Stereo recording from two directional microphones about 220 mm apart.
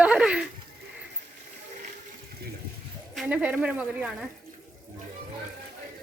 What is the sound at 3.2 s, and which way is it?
A woman's voice, 5° right (ahead or behind).